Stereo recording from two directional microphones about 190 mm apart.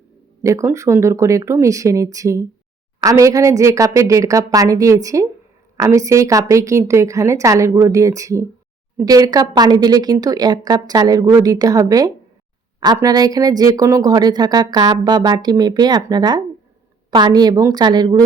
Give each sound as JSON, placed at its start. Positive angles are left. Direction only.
{"t": 0.4, "sound": "a woman's voice", "side_deg": -15}